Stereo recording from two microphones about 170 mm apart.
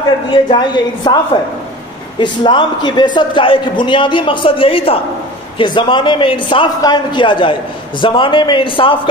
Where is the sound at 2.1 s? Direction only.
25° left (ahead or behind).